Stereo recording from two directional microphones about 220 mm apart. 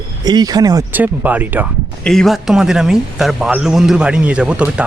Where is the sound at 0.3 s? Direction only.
15° right (ahead or behind).